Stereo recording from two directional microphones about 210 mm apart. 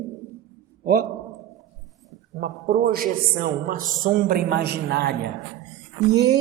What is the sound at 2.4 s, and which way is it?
A man's voice, 40° right (ahead or behind).